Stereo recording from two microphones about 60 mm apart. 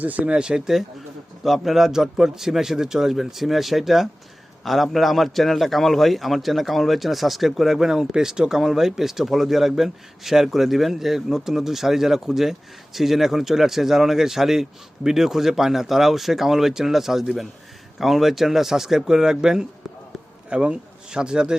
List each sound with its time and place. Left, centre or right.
0.0 s a man's voice: right